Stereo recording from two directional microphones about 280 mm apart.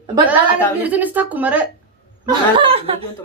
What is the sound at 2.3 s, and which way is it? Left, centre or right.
Speech, centre.